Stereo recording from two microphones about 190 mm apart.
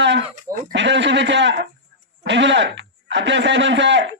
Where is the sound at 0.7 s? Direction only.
70° right (ahead or behind).